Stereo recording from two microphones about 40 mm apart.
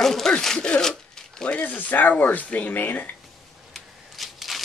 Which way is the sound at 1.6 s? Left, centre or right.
Left.